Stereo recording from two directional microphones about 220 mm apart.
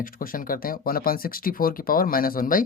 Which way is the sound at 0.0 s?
40° left (ahead or behind).